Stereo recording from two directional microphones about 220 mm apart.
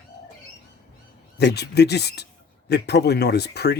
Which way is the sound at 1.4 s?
50° left (ahead or behind).